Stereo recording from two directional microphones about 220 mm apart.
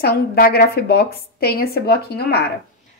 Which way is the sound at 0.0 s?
45° left (ahead or behind).